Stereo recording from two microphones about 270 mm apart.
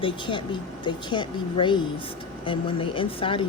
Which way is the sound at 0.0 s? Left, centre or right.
Centre.